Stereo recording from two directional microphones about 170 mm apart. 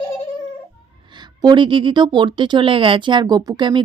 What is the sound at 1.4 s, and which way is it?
Speech, 25° right (ahead or behind).